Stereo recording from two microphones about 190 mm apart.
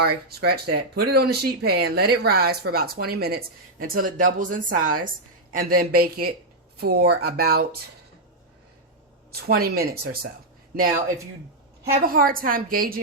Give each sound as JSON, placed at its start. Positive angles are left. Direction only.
{"t": 0.0, "sound": "speech", "side_deg": -55}
{"t": 9.3, "sound": "speech", "side_deg": -55}
{"t": 11.9, "sound": "speech", "side_deg": -50}